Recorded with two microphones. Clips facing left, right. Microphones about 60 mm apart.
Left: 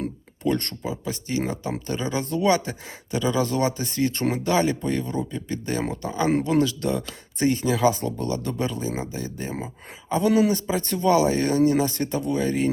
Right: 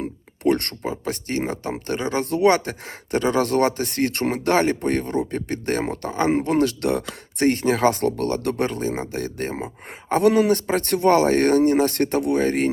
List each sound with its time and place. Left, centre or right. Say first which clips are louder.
0.4 s speech: right 4 dB; right